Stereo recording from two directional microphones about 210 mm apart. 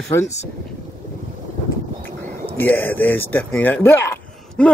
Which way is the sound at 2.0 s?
10° left (ahead or behind).